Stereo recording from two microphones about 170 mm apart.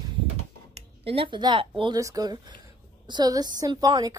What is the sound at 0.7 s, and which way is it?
A woman's voice, 35° right (ahead or behind).